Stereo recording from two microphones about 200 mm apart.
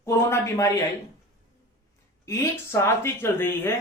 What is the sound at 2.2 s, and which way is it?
Speech, 15° left (ahead or behind).